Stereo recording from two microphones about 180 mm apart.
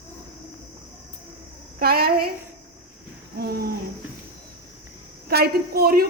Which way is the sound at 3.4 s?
60° right (ahead or behind).